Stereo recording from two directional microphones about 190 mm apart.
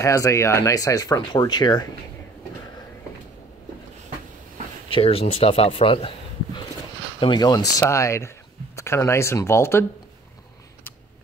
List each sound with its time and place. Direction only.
0.0 s speech: 15° left (ahead or behind)
4.8 s speech: 30° left (ahead or behind); by 9.8 s 15° left (ahead or behind)